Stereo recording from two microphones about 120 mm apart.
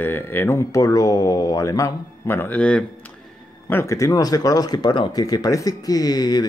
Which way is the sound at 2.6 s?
10° left (ahead or behind).